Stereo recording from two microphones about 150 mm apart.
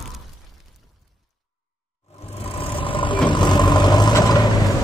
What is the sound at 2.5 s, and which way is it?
Vehicle, 35° left (ahead or behind).